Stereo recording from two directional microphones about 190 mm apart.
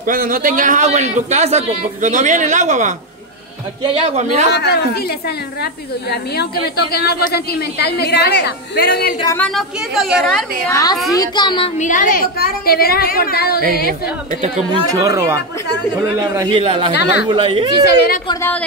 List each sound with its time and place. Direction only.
0.0 s a man's voice: 45° right (ahead or behind)
4.0 s a man's voice: 35° right (ahead or behind)
4.5 s a woman's voice: 60° left (ahead or behind)
9.4 s a woman's voice: centre (ahead or behind)
10.7 s a child's voice: 20° left (ahead or behind)
11.8 s a woman's voice: 45° left (ahead or behind)
14.4 s a man's voice: 20° right (ahead or behind)
17.8 s a woman's voice: 55° left (ahead or behind)
18.3 s speech: 10° left (ahead or behind)